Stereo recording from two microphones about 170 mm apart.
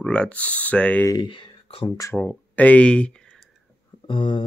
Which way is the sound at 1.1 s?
30° left (ahead or behind).